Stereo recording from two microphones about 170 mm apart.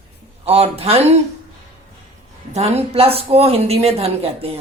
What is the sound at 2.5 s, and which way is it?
Speech, 40° right (ahead or behind).